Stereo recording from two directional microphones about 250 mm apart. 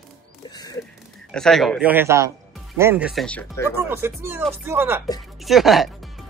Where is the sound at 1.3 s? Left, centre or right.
Centre.